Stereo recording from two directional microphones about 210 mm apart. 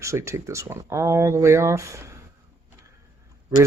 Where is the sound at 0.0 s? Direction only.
15° right (ahead or behind).